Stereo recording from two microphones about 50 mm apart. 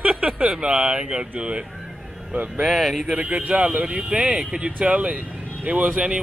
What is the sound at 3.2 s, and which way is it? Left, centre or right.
A man's voice, right.